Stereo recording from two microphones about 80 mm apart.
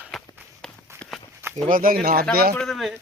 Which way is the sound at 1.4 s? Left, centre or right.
Right.